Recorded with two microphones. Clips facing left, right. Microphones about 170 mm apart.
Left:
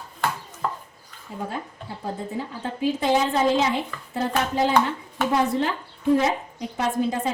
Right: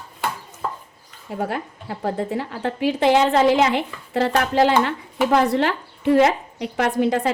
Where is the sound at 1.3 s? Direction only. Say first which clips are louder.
Right 5 dB; 75° right (ahead or behind).